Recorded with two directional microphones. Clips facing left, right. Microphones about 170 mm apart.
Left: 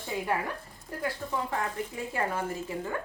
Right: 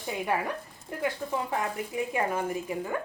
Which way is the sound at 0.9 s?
20° right (ahead or behind).